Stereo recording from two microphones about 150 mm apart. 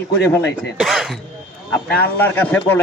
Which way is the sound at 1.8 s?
10° left (ahead or behind).